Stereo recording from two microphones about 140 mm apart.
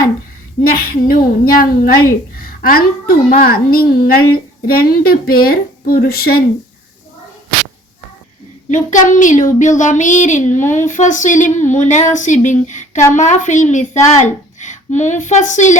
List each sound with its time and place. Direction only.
0.6 s a woman's voice: 90° left
8.7 s child singing: 65° left (ahead or behind)